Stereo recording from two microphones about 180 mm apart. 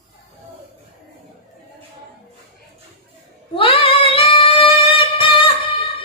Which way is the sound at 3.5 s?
30° left (ahead or behind).